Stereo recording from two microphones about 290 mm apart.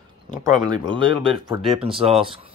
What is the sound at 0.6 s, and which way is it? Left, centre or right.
Speech, centre.